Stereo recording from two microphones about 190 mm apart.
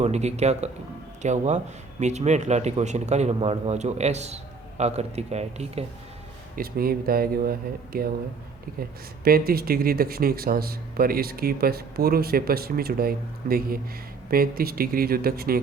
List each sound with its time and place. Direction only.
0.0 s speech: 35° right (ahead or behind)
6.6 s speech: 50° right (ahead or behind)
9.2 s speech: 50° right (ahead or behind)